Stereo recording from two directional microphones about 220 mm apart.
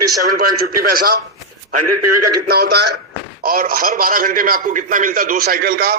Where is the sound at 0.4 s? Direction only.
40° right (ahead or behind).